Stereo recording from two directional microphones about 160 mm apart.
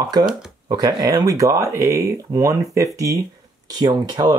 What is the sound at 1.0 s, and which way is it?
Speech, 25° right (ahead or behind).